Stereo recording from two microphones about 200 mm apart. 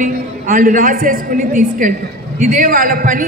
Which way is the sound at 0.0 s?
40° right (ahead or behind).